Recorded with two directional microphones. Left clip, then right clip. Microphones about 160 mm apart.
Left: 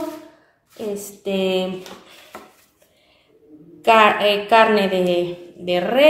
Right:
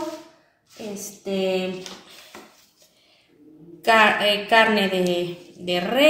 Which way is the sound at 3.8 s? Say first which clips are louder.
Left 3 dB; 10° left (ahead or behind).